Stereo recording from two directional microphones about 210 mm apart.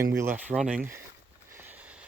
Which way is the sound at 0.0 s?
10° right (ahead or behind).